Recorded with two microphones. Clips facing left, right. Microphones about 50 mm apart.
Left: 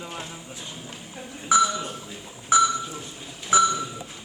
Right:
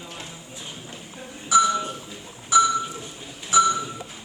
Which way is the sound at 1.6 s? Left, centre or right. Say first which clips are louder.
Right 2 dB; centre.